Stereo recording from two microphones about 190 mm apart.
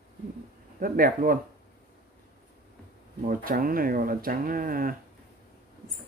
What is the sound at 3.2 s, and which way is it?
Speech, 50° right (ahead or behind).